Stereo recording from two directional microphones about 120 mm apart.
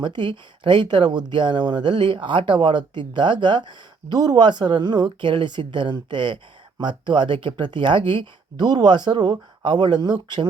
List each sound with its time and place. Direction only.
0.0 s speech: 40° right (ahead or behind)